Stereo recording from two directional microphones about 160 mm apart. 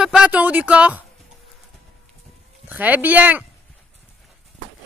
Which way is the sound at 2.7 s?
10° right (ahead or behind).